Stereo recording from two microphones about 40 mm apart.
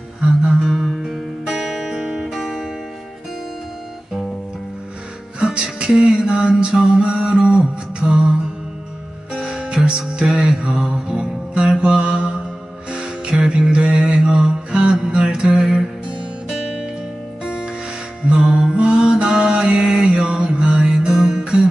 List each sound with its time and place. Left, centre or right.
0.7 s music: centre
1.4 s music: centre
5.4 s music: right
9.3 s music: centre
16.1 s music: right
17.4 s music: centre
18.3 s mantra: centre
21.1 s music: centre